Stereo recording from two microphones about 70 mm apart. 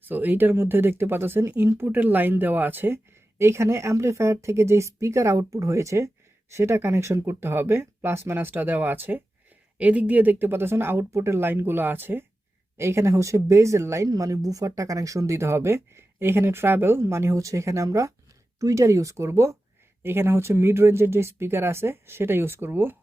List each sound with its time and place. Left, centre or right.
0.1 s speech: right
12.7 s speech: right